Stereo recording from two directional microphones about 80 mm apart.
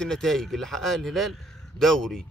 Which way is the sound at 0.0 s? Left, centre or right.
Centre.